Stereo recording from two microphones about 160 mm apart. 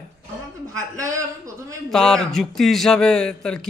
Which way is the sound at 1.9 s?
5° left (ahead or behind).